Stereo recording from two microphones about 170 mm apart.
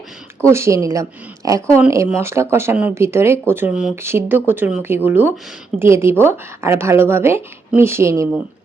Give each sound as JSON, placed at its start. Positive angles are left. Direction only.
{"t": 0.5, "sound": "speech", "side_deg": -15}